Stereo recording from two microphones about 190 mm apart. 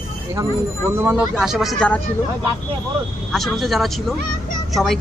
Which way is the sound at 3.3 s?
Centre (ahead or behind).